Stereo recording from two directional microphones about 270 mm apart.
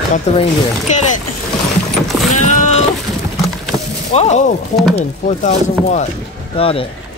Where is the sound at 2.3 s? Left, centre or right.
Left.